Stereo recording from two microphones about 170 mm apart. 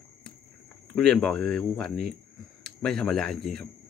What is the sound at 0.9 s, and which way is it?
Speech, 5° left (ahead or behind).